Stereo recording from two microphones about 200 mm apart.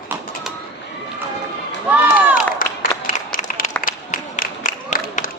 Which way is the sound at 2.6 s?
45° left (ahead or behind).